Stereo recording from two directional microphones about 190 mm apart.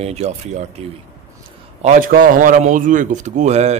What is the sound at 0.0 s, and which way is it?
Speech, 35° right (ahead or behind).